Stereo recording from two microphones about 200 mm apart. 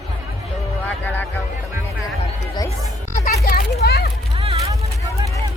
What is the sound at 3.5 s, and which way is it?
Children playing, 50° left (ahead or behind).